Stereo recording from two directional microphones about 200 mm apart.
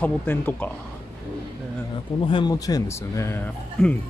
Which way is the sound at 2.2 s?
25° left (ahead or behind).